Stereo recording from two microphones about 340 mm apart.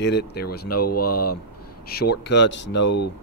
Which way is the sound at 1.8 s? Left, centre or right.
Left.